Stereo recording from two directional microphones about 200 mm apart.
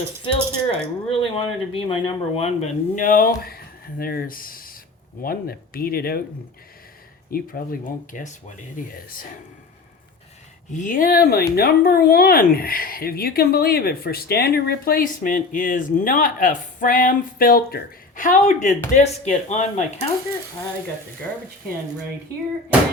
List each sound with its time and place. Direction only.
0.3 s speech: 30° left (ahead or behind); by 6.2 s 50° left (ahead or behind)
7.3 s speech: 45° left (ahead or behind)
10.7 s speech: 40° left (ahead or behind)